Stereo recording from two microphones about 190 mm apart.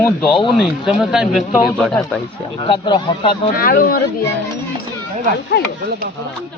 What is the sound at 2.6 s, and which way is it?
Speech, 25° left (ahead or behind).